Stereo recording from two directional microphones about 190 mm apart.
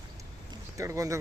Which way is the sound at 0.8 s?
15° right (ahead or behind).